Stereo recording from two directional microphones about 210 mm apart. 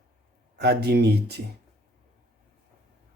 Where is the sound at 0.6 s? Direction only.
50° right (ahead or behind).